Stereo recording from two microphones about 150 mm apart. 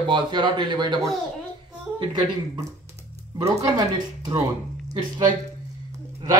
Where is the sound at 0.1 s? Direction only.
30° right (ahead or behind).